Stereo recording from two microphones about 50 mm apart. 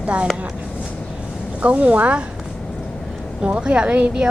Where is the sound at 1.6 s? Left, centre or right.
Right.